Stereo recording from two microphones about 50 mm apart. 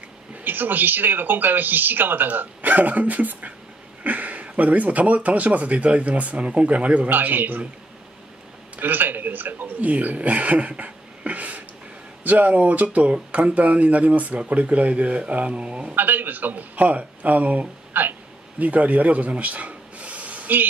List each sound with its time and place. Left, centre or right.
0.4 s speech: right
7.1 s speech: right
8.7 s a man's voice: right
15.9 s speech: right